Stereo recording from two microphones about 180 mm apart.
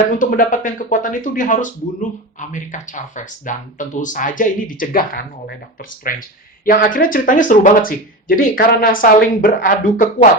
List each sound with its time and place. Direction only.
0.1 s speech: 50° left (ahead or behind)